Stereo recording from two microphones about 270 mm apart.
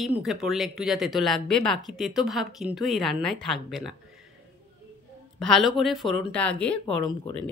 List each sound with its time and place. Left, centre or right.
0.0 s speech: centre
5.4 s speech: centre